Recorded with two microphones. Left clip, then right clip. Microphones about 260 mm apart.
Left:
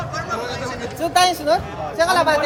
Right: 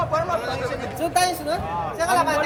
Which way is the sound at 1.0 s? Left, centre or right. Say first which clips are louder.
Left 5 dB; centre.